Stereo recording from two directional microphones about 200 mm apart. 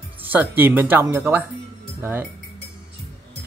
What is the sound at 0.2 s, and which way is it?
Speech, 10° right (ahead or behind).